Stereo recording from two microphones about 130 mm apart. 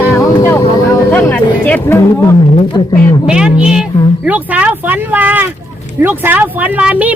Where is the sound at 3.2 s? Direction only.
5° right (ahead or behind).